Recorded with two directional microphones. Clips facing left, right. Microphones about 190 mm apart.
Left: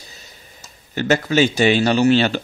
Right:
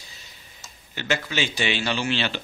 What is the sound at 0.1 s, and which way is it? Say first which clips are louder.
Speech: left 5 dB; 45° left (ahead or behind).